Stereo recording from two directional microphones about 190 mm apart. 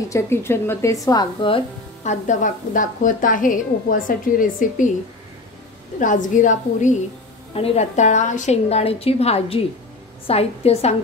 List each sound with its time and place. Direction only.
0.1 s a woman's voice: 15° left (ahead or behind)
2.0 s a woman's voice: 40° left (ahead or behind)
5.9 s a woman's voice: 40° left (ahead or behind)